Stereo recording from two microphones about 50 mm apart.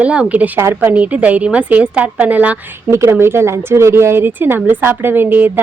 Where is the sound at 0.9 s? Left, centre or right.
Right.